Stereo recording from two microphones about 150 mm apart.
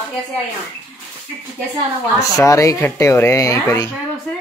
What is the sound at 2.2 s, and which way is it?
A woman's voice, 20° left (ahead or behind).